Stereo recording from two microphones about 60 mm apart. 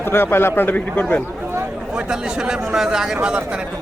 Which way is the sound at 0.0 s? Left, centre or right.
Left.